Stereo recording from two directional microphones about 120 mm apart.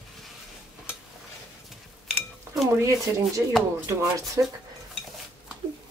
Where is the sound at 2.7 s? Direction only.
25° right (ahead or behind).